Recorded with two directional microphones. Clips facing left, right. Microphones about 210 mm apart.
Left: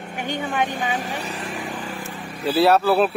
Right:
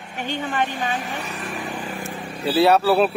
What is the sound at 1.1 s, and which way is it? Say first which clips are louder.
Speech: left 1 dB; 35° left (ahead or behind).